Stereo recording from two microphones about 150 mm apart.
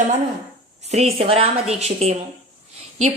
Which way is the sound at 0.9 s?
45° right (ahead or behind).